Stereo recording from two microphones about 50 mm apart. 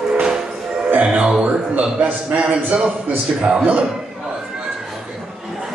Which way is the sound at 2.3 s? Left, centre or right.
Right.